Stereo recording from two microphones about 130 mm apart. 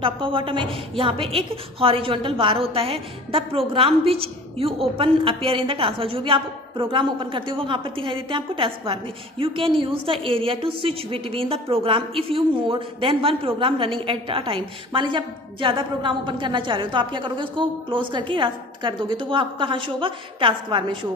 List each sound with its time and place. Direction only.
0.0 s a woman's voice: 40° right (ahead or behind)